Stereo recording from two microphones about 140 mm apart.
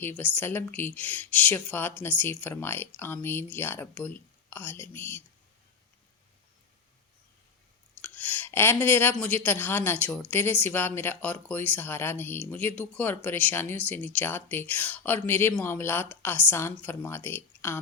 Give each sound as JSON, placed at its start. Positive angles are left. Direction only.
{"t": 0.3, "sound": "speech", "side_deg": 15}
{"t": 8.0, "sound": "speech", "side_deg": 10}